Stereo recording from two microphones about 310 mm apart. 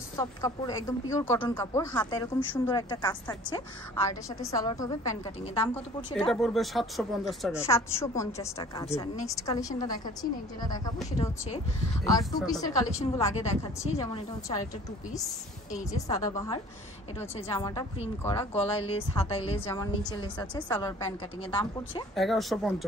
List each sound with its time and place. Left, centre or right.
0.1 s speech: centre
6.3 s speech: centre
15.9 s a woman's voice: centre
22.1 s speech: centre